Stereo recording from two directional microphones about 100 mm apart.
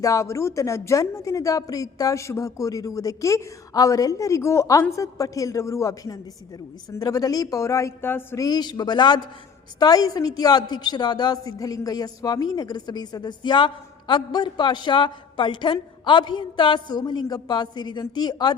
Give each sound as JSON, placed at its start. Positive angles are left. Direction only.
{"t": 0.0, "sound": "a woman's voice", "side_deg": 35}
{"t": 8.4, "sound": "a woman's voice", "side_deg": 40}
{"t": 9.8, "sound": "a woman's voice", "side_deg": 40}